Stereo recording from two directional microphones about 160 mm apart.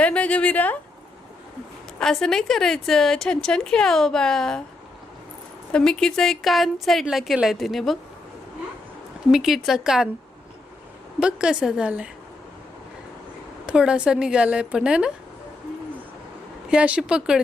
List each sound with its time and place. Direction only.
0.0 s a sound: 10° left (ahead or behind)
2.0 s a woman's voice: 5° left (ahead or behind)
5.7 s a woman's voice: 5° left (ahead or behind)
9.3 s a woman's voice: centre (ahead or behind)
11.2 s a woman's voice: 5° right (ahead or behind)
13.7 s a woman's voice: 5° right (ahead or behind)
16.6 s a woman's voice: 10° right (ahead or behind)